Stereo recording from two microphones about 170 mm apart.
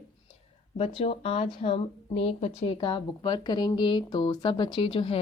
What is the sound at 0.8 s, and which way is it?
Speech, 35° left (ahead or behind).